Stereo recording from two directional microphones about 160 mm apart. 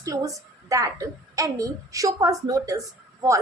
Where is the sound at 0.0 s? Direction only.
20° right (ahead or behind).